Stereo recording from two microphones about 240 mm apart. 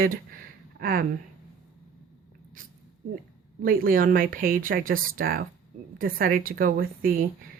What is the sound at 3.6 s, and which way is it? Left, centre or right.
Speech, right.